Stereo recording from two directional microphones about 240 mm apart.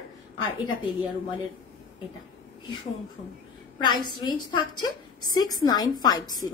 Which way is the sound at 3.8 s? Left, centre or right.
Centre.